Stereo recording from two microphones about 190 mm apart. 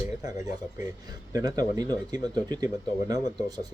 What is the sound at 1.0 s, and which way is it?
Speech, 20° right (ahead or behind).